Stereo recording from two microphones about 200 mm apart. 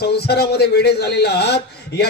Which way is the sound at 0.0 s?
55° left (ahead or behind).